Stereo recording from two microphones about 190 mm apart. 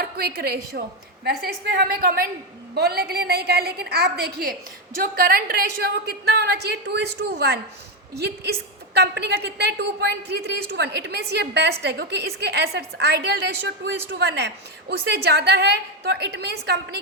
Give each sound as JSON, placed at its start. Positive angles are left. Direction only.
{"t": 0.0, "sound": "a woman's voice", "side_deg": -55}
{"t": 9.0, "sound": "a woman's voice", "side_deg": -60}